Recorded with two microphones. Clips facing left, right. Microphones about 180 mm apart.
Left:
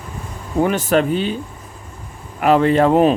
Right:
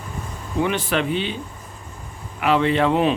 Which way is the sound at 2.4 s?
45° left (ahead or behind).